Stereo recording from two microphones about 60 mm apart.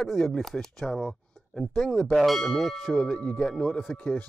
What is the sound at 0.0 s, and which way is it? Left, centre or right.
Speech, centre.